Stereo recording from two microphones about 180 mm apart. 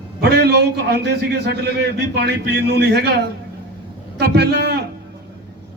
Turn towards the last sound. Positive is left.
turn(degrees=-65)  # may be behind; listen again after turning